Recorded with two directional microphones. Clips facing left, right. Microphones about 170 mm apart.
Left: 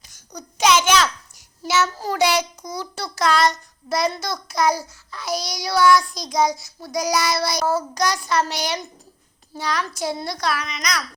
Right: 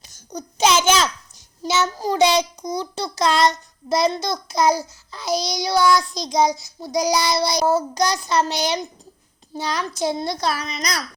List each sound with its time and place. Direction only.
0.3 s a child's voice: 25° right (ahead or behind)